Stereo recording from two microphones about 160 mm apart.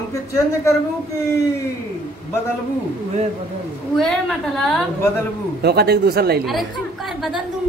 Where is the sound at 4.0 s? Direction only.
Centre (ahead or behind).